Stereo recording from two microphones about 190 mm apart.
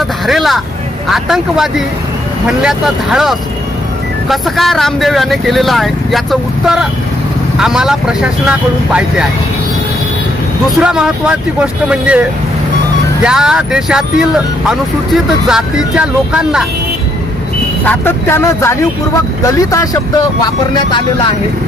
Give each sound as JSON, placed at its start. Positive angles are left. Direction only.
{"t": 0.3, "sound": "speech", "side_deg": 0}
{"t": 7.5, "sound": "speech", "side_deg": 0}
{"t": 10.8, "sound": "speech", "side_deg": -5}
{"t": 17.8, "sound": "speech", "side_deg": 10}